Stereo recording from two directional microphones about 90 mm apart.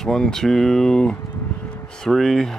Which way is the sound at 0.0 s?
5° left (ahead or behind).